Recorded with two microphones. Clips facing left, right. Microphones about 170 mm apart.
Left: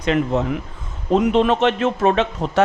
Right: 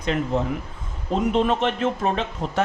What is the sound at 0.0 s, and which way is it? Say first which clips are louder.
Speech: left 4 dB; 85° left.